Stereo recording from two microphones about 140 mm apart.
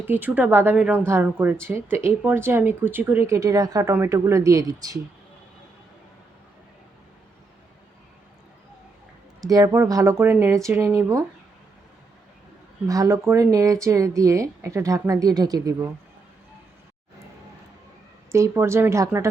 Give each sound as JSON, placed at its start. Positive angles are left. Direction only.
{"t": 0.0, "sound": "a woman's voice", "side_deg": -15}
{"t": 9.4, "sound": "a woman's voice", "side_deg": -25}
{"t": 12.9, "sound": "a woman's voice", "side_deg": -25}
{"t": 18.3, "sound": "a woman's voice", "side_deg": -20}